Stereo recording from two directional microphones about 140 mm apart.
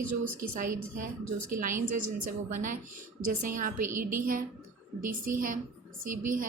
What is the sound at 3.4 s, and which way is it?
A woman's voice, 85° right.